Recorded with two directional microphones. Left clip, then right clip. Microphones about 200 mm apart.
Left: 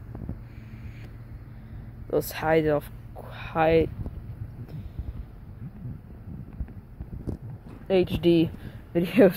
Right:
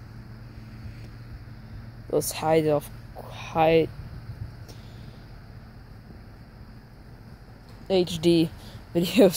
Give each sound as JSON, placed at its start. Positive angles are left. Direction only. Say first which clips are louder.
{"t": 2.0, "sound": "speech", "louder": "right 1 dB", "side_deg": -10}
{"t": 7.8, "sound": "speech", "louder": "even", "side_deg": -10}